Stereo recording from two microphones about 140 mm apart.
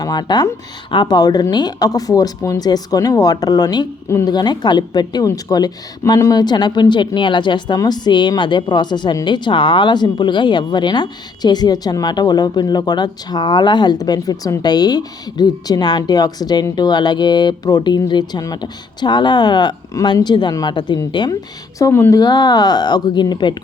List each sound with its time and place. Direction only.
0.0 s a woman's voice: 30° left (ahead or behind)